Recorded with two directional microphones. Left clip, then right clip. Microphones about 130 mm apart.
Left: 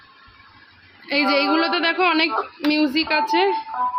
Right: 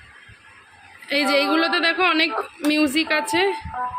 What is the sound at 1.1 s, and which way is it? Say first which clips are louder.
A woman's voice: left 1 dB; 10° left (ahead or behind).